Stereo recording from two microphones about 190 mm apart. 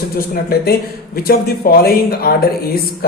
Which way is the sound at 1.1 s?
50° left (ahead or behind).